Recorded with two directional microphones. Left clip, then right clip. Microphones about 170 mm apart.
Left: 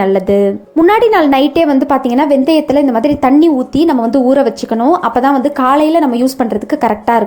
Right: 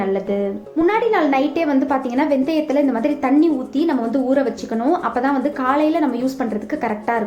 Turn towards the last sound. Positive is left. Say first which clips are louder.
# left 9 dB
turn(degrees=45)  # may be behind; listen again after turning